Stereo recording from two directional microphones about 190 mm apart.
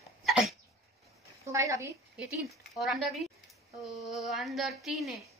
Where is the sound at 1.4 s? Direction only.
15° right (ahead or behind).